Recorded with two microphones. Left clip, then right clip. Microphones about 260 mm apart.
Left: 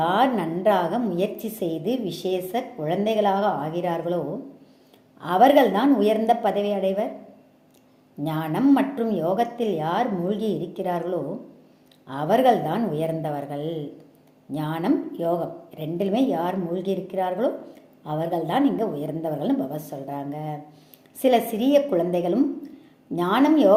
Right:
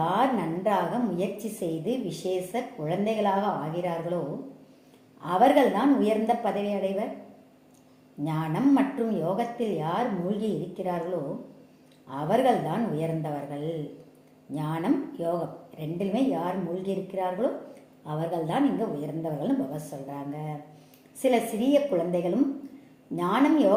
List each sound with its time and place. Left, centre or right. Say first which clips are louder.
0.0 s a woman's voice: left 4 dB; left
5.2 s a woman's voice: left 4 dB; left
8.2 s a woman's voice: left 4 dB; left
12.0 s a woman's voice: left 5 dB; left